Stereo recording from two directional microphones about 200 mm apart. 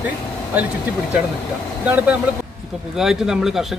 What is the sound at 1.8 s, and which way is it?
A man's voice, 5° right (ahead or behind).